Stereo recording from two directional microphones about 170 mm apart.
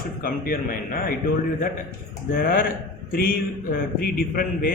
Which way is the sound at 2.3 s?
60° left (ahead or behind).